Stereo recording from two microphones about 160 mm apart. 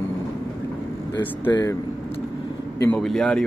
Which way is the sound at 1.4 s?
25° left (ahead or behind).